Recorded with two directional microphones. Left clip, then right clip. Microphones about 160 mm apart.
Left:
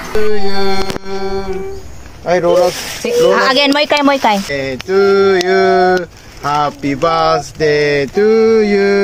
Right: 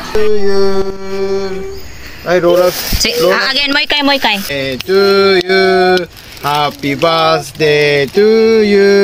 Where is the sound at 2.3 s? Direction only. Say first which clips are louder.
Right 2 dB; 30° right (ahead or behind).